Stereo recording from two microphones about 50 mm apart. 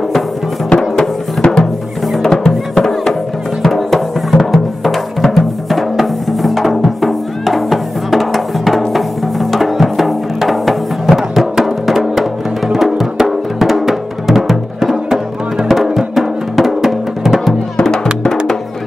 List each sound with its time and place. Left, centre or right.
0.7 s music: centre
17.7 s music: centre